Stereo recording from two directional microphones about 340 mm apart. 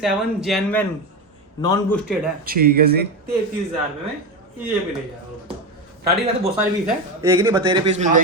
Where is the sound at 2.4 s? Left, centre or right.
Right.